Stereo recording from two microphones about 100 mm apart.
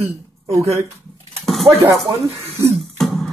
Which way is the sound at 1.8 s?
30° right (ahead or behind).